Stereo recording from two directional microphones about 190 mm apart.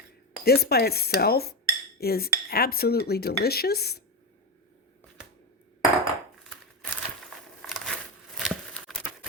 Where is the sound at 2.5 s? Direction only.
50° left (ahead or behind).